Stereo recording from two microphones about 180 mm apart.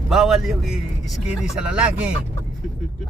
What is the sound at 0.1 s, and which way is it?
Speech, centre (ahead or behind).